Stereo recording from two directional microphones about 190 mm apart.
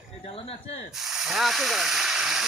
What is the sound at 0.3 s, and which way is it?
Speech, 30° left (ahead or behind).